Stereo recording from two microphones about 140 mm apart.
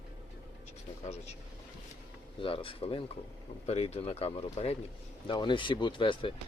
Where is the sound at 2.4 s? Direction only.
40° left (ahead or behind).